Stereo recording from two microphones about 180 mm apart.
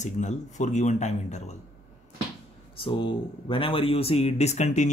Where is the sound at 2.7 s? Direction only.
30° left (ahead or behind).